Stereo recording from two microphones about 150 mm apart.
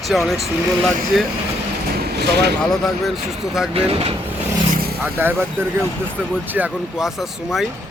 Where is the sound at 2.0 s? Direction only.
90° right.